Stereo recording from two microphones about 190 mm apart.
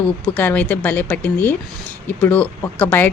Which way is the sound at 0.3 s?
10° left (ahead or behind).